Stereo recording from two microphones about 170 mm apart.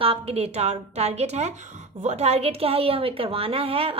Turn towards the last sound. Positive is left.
turn(degrees=-35)  # may be behind; listen again after turning